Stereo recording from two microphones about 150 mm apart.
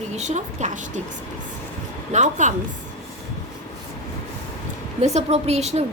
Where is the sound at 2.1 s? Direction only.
50° right (ahead or behind).